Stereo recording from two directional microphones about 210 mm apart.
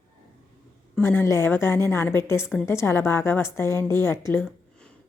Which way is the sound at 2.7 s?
10° left (ahead or behind).